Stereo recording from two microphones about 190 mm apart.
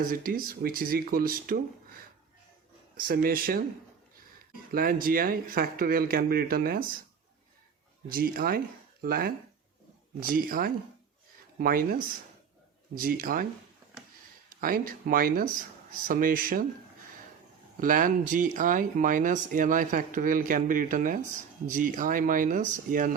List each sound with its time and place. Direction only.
0.0 s speech: 50° right (ahead or behind)
3.1 s speech: 50° right (ahead or behind)
4.7 s speech: 50° right (ahead or behind)
8.1 s speech: 50° right (ahead or behind)
14.6 s speech: 50° right (ahead or behind)
17.7 s speech: 45° right (ahead or behind)